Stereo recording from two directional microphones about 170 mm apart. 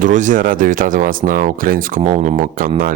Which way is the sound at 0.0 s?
50° right (ahead or behind).